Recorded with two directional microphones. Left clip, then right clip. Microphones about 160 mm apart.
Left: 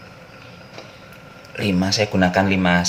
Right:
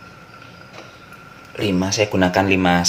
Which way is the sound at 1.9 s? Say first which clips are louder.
Right 1 dB; 25° right (ahead or behind).